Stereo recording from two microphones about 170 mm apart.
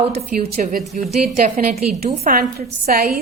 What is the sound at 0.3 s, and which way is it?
A woman's voice, 55° right (ahead or behind).